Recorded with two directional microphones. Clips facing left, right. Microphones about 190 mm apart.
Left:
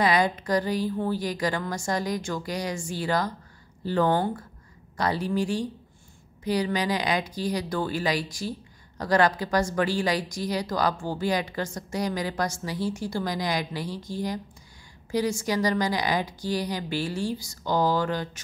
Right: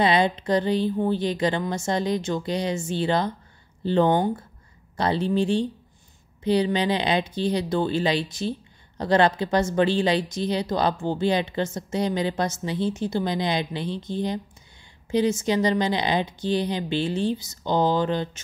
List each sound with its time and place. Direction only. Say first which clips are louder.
0.0 s speech: right 2 dB; 25° right (ahead or behind)